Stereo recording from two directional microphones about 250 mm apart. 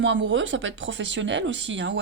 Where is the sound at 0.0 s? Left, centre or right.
Right.